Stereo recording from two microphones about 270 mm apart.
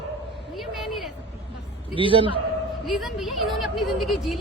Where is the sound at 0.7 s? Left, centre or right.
Centre.